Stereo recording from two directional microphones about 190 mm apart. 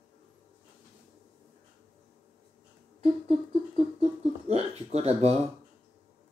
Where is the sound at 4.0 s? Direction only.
35° right (ahead or behind).